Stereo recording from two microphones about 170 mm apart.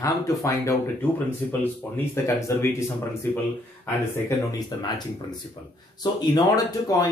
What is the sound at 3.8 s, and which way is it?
Speech, 20° left (ahead or behind).